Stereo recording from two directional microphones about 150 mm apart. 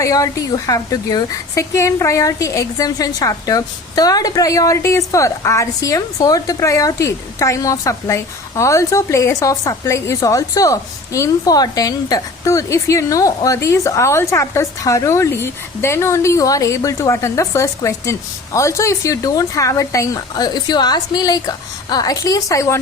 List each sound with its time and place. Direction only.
0.0 s a woman's voice: 20° left (ahead or behind)